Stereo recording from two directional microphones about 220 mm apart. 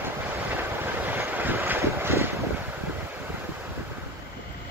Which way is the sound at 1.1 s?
10° right (ahead or behind).